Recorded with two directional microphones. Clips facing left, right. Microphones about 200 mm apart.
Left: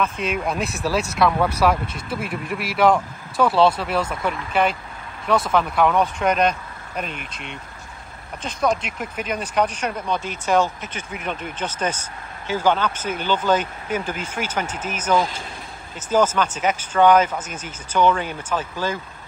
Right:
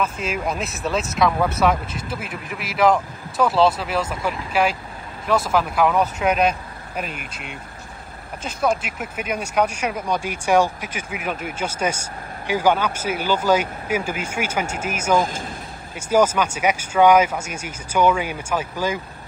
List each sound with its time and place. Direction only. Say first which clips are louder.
0.0 s speech: left 1 dB; centre (ahead or behind)
15.1 s speech: even; 45° right (ahead or behind)
16.0 s speech: right 1 dB; 10° right (ahead or behind)